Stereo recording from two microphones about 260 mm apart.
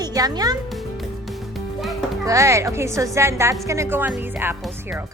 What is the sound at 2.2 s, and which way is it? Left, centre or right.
A child's voice, centre.